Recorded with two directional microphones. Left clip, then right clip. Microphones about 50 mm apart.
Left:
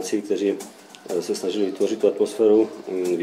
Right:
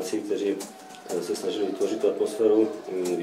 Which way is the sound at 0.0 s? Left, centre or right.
Left.